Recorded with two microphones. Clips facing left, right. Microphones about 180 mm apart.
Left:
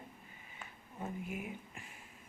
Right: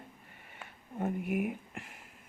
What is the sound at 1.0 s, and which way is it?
Speech, 65° right (ahead or behind).